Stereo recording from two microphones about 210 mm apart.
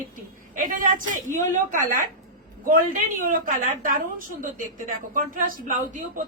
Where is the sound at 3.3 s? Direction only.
40° right (ahead or behind).